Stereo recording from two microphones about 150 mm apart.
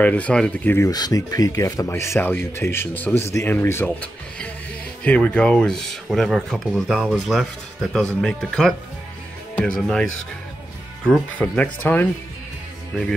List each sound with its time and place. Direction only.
0.0 s speech: 10° left (ahead or behind)
0.7 s speech: 25° left (ahead or behind)
12.9 s speech: centre (ahead or behind)